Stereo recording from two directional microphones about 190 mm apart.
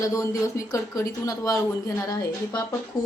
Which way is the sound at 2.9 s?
20° left (ahead or behind).